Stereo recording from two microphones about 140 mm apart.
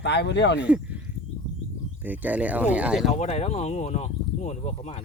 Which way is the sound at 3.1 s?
50° left (ahead or behind).